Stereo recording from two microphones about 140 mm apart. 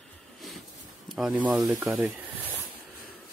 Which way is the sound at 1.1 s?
Centre (ahead or behind).